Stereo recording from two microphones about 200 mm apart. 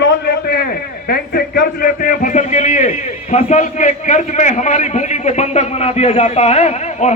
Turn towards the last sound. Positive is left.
turn(degrees=35)  # may be behind; listen again after turning